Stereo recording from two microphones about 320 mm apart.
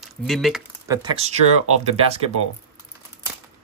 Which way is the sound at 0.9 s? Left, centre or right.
Centre.